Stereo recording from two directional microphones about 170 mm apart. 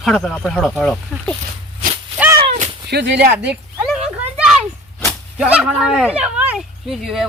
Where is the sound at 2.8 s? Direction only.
85° right.